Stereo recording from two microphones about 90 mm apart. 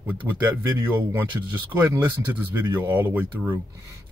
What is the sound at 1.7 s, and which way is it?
Speech, 25° right (ahead or behind).